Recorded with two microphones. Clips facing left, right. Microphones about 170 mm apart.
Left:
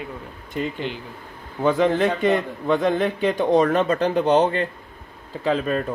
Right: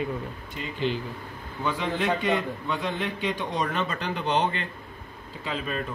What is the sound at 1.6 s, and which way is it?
Speech, 40° left (ahead or behind).